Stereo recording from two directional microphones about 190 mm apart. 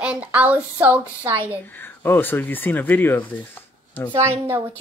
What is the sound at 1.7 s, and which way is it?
Speech, 10° left (ahead or behind).